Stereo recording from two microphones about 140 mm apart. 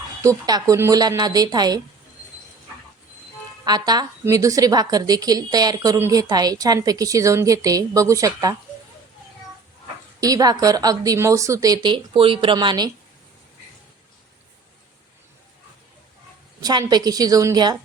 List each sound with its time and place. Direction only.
0.2 s a woman's voice: 25° right (ahead or behind)
3.6 s a woman's voice: 30° right (ahead or behind)
10.2 s a woman's voice: 25° right (ahead or behind)
16.6 s a woman's voice: 30° right (ahead or behind)